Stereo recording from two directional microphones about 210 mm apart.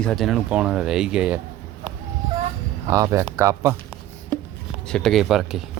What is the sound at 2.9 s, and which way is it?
Speech, 15° right (ahead or behind).